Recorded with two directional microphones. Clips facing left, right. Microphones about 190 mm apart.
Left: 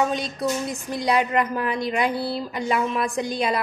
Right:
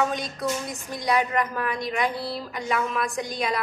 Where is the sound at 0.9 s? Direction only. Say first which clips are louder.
Left 2 dB; 30° left (ahead or behind).